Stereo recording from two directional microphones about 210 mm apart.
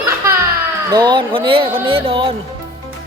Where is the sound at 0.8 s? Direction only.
20° right (ahead or behind).